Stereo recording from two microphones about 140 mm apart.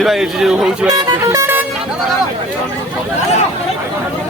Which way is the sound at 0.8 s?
25° right (ahead or behind).